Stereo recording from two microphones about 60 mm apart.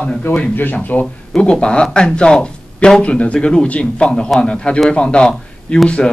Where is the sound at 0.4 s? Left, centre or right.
Left.